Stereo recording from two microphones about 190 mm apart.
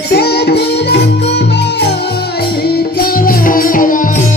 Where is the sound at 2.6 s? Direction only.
50° left (ahead or behind).